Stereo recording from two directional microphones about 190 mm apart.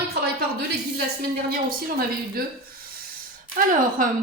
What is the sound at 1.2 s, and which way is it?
A woman's voice, 50° right (ahead or behind).